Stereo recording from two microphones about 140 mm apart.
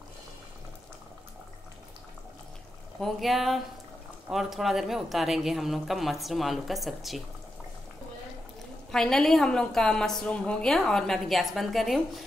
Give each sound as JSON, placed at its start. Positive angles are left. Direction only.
{"t": 3.0, "sound": "a woman's voice", "side_deg": 0}
{"t": 8.9, "sound": "a woman's voice", "side_deg": 5}